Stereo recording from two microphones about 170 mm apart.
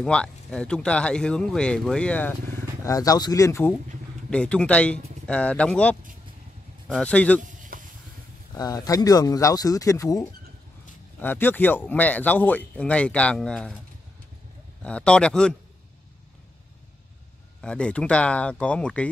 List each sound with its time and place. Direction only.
0.0 s speech: 5° left (ahead or behind)
2.8 s speech: 20° left (ahead or behind)
7.5 s a sound: 50° right (ahead or behind)
8.5 s speech: 20° left (ahead or behind); by 13.7 s 5° left (ahead or behind)
14.8 s speech: 5° left (ahead or behind)
17.6 s speech: 5° left (ahead or behind)